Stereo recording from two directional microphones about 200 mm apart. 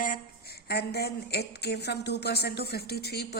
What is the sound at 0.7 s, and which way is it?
A woman's voice, 55° left (ahead or behind).